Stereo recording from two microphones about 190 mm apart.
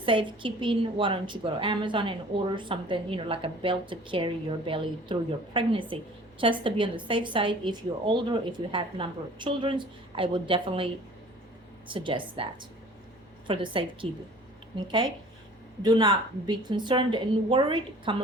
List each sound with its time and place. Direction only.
0.0 s a woman's voice: 25° right (ahead or behind)
11.9 s a woman's voice: 25° right (ahead or behind)
15.8 s a woman's voice: 20° right (ahead or behind)